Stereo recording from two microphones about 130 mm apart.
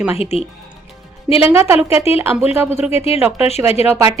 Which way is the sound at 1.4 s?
20° right (ahead or behind).